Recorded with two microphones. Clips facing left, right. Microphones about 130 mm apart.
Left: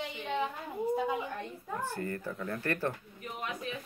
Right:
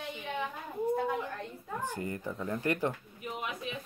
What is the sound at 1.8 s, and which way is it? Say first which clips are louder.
Speech: right 1 dB; 15° right (ahead or behind).